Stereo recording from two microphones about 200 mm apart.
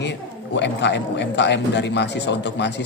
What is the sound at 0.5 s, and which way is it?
A man's voice, 60° left (ahead or behind).